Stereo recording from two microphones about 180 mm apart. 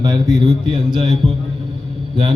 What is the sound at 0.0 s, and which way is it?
A man's voice, 20° right (ahead or behind).